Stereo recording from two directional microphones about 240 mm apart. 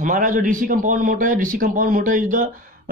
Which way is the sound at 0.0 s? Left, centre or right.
Right.